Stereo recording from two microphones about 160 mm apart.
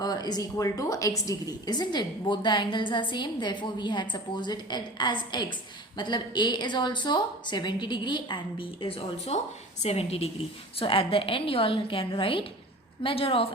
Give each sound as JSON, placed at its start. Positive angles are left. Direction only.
{"t": 0.0, "sound": "a woman's voice", "side_deg": 25}